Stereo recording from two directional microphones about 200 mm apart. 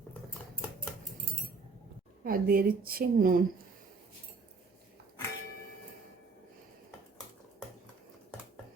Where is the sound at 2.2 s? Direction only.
45° right (ahead or behind).